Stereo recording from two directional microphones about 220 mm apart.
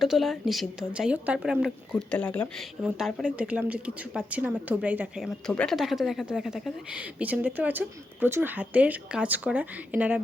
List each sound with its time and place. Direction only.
0.0 s speech: centre (ahead or behind)
2.8 s speech: 5° right (ahead or behind)